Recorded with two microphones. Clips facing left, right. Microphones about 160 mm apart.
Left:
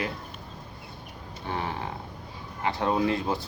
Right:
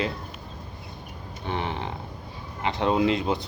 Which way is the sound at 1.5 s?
20° right (ahead or behind).